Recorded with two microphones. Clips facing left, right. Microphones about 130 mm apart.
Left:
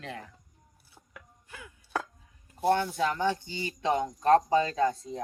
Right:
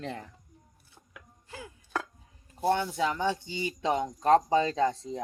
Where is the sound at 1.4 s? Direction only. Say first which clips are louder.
Right 5 dB; 30° right (ahead or behind).